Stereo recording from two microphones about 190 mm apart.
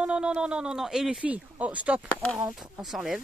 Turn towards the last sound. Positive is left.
turn(degrees=0)  # may be behind; listen again after turning